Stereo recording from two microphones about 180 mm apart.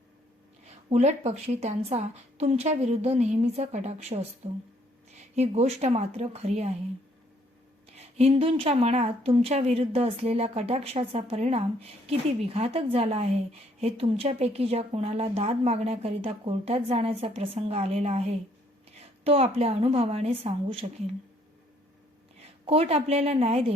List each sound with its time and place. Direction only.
0.6 s a woman's voice: 35° right (ahead or behind)
7.9 s a woman's voice: 35° right (ahead or behind)
22.4 s a woman's voice: 30° right (ahead or behind)